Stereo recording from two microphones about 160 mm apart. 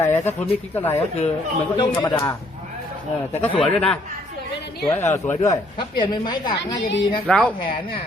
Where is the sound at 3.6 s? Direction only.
5° left (ahead or behind).